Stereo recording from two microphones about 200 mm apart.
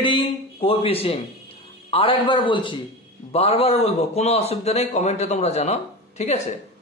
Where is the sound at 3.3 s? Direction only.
30° left (ahead or behind).